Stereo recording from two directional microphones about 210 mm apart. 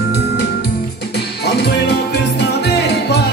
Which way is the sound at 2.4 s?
50° left (ahead or behind).